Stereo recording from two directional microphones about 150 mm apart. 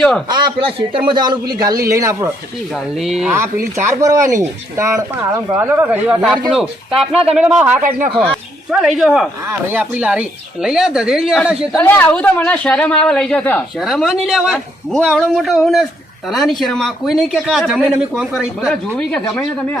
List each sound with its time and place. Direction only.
0.3 s a man's voice: 30° right (ahead or behind)
2.7 s speech: 5° right (ahead or behind)
3.8 s speech: 20° right (ahead or behind)
8.2 s speech: centre (ahead or behind)
11.8 s speech: 15° left (ahead or behind)
13.7 s speech: centre (ahead or behind)
18.7 s speech: 5° left (ahead or behind)